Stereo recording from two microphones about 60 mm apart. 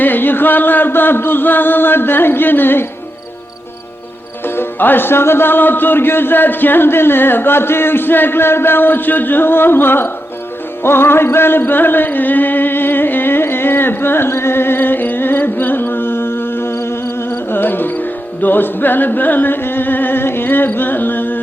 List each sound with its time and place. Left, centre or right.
0.0 s speech: left
4.4 s speech: left
10.8 s music: left